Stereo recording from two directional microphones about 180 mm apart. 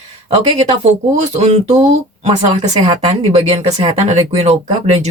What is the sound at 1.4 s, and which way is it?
Speech, 40° right (ahead or behind).